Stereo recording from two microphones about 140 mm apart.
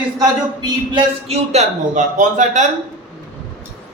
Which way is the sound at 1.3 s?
55° right (ahead or behind).